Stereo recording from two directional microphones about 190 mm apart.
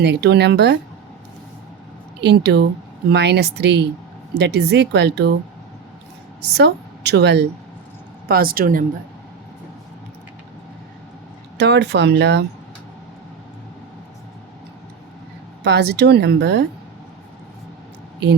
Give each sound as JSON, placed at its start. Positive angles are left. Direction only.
{"t": 0.0, "sound": "speech", "side_deg": -65}
{"t": 2.2, "sound": "speech", "side_deg": -60}
{"t": 6.4, "sound": "a woman's voice", "side_deg": -60}
{"t": 11.5, "sound": "speech", "side_deg": -60}
{"t": 15.6, "sound": "speech", "side_deg": -60}